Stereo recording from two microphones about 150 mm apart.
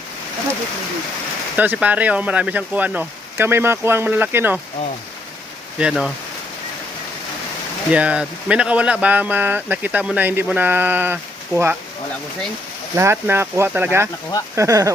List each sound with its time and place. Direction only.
1.5 s speech: 10° right (ahead or behind)
5.8 s speech: centre (ahead or behind)
7.9 s speech: 10° right (ahead or behind)
13.0 s speech: 15° right (ahead or behind)